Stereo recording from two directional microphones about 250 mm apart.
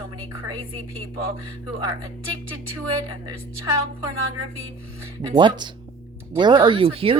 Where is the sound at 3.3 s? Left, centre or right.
Centre.